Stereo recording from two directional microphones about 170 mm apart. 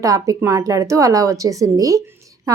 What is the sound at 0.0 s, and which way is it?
A woman's voice, 20° right (ahead or behind).